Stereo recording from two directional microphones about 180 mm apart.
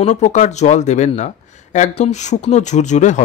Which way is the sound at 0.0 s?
40° left (ahead or behind).